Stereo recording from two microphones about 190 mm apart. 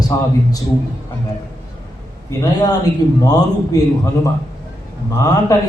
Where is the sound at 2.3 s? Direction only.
20° left (ahead or behind).